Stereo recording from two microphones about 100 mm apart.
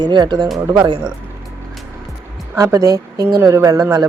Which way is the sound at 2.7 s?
35° right (ahead or behind).